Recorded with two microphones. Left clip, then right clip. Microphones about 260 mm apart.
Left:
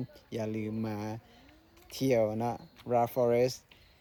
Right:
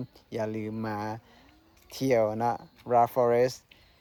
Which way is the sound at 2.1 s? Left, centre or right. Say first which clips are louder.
Right 4 dB; right.